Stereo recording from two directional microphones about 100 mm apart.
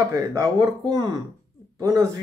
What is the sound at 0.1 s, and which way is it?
Speech, 35° right (ahead or behind).